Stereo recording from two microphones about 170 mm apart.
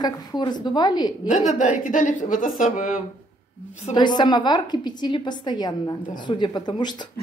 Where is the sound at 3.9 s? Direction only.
25° left (ahead or behind).